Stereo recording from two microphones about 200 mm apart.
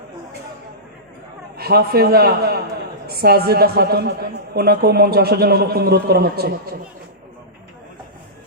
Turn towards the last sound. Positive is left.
turn(degrees=-50)  # may be behind; listen again after turning